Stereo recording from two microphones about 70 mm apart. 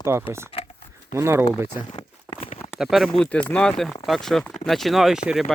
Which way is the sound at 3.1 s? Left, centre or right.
Centre.